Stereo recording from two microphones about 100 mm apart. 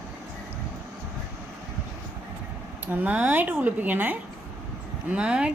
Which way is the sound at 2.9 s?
15° right (ahead or behind).